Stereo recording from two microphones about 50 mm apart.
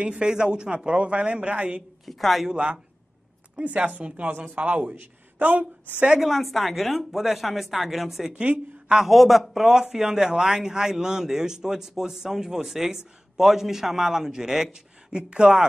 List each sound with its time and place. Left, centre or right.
0.0 s a man's voice: centre
2.0 s a woman's voice: centre
2.5 s a man's voice: right
6.1 s a woman's voice: centre
8.4 s a woman's voice: right
8.9 s a man's voice: centre; by 15.6 s right